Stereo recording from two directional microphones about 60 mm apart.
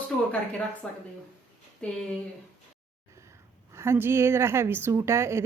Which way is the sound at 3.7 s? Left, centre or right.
Right.